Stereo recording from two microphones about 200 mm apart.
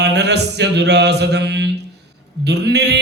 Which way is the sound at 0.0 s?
60° right (ahead or behind).